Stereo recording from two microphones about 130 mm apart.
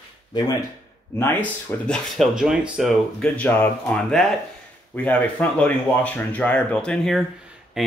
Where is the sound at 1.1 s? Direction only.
20° left (ahead or behind).